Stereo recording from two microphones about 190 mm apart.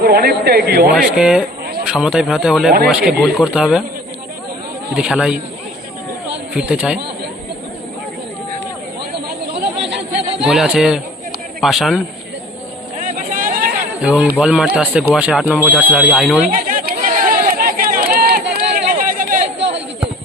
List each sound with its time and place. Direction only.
0.0 s speech: 55° right (ahead or behind)
0.9 s speech: 5° right (ahead or behind)
4.9 s speech: 5° right (ahead or behind)
6.5 s speech: 5° right (ahead or behind)
9.6 s chatter: 65° right (ahead or behind)
10.4 s speech: centre (ahead or behind)
13.0 s vehicle: 45° right (ahead or behind)
14.0 s speech: 5° right (ahead or behind)
16.5 s chatter: 45° right (ahead or behind)
19.5 s a sound: 65° right (ahead or behind)